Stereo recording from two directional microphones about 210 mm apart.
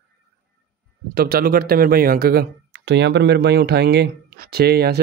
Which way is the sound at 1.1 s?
45° right (ahead or behind).